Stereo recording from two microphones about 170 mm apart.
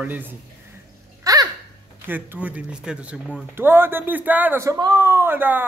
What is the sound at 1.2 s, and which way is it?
Babbling, 20° right (ahead or behind).